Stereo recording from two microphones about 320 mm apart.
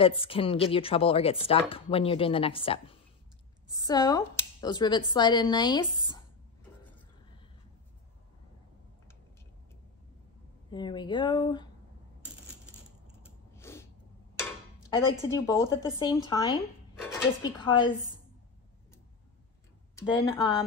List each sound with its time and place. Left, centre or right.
0.0 s speech: centre
10.7 s speech: centre
13.6 s a sound: centre
15.2 s speech: centre
20.0 s speech: centre